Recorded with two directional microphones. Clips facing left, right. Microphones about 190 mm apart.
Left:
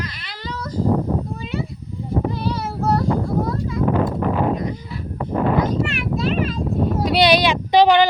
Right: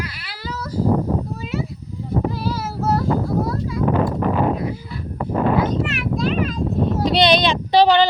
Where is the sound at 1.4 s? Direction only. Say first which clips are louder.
Right 1 dB; centre (ahead or behind).